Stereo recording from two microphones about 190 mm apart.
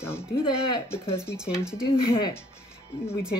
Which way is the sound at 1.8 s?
30° left (ahead or behind).